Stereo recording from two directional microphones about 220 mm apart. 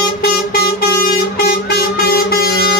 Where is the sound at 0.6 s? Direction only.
45° left (ahead or behind).